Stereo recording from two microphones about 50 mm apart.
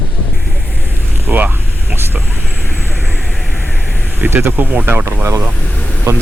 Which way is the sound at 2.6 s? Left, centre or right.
Left.